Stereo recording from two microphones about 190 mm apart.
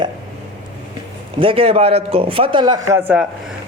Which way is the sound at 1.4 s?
30° right (ahead or behind).